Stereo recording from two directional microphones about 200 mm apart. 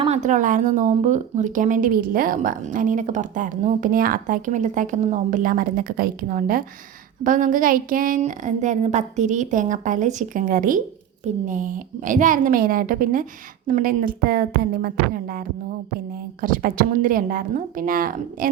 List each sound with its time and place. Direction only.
0.0 s a woman's voice: 35° right (ahead or behind)